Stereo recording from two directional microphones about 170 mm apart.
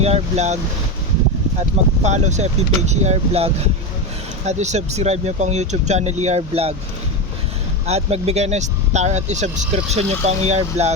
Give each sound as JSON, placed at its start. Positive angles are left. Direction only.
{"t": 0.0, "sound": "speech", "side_deg": -40}
{"t": 2.0, "sound": "speech", "side_deg": -45}
{"t": 7.9, "sound": "speech", "side_deg": -40}